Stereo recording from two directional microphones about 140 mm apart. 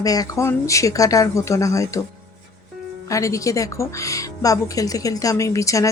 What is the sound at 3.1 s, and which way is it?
Speech, 25° left (ahead or behind).